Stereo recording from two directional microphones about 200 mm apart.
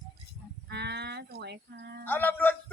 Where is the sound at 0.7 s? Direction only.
55° right (ahead or behind).